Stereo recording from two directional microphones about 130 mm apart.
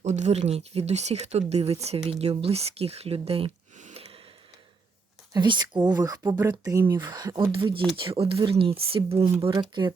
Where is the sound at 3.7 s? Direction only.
60° right (ahead or behind).